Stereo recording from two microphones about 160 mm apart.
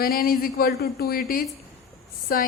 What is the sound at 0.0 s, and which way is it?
A woman's voice, 65° left (ahead or behind).